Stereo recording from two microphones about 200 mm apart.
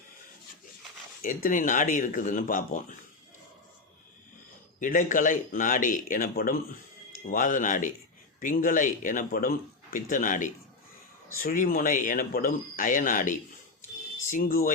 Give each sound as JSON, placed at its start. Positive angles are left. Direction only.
{"t": 1.2, "sound": "speech", "side_deg": 45}
{"t": 4.8, "sound": "speech", "side_deg": 40}